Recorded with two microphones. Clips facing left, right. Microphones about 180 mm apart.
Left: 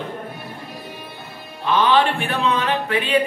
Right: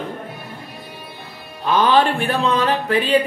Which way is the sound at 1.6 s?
40° right (ahead or behind).